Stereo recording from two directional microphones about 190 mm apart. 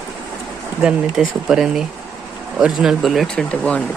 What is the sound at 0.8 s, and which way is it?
Speech, 5° right (ahead or behind).